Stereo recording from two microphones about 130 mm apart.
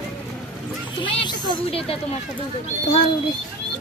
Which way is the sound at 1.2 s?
35° left (ahead or behind).